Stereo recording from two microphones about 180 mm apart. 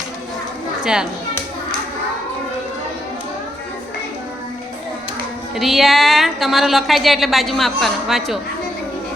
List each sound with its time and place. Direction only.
5.5 s a woman's voice: centre (ahead or behind)